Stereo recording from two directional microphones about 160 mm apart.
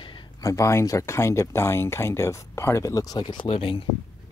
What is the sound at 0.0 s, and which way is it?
Speech, 25° left (ahead or behind).